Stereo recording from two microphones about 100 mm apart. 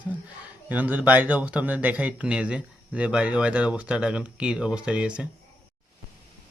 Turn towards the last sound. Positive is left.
turn(degrees=-10)  # may be behind; listen again after turning